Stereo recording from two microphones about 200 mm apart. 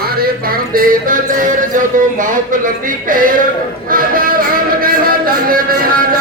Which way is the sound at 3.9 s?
45° right (ahead or behind).